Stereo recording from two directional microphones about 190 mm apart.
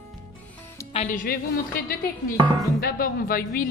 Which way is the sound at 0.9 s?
45° left (ahead or behind).